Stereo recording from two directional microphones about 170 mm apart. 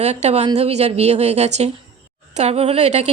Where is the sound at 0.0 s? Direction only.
40° right (ahead or behind).